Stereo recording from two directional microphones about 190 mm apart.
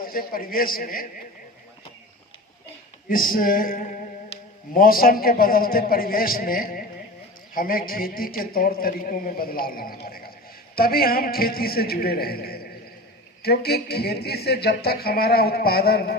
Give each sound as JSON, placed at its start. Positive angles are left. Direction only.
{"t": 0.0, "sound": "a man's voice", "side_deg": 50}
{"t": 3.1, "sound": "a man's voice", "side_deg": 50}
{"t": 4.3, "sound": "mantra", "side_deg": 30}
{"t": 4.7, "sound": "a man's voice", "side_deg": 50}
{"t": 10.1, "sound": "a sound", "side_deg": 50}
{"t": 10.8, "sound": "a man's voice", "side_deg": 50}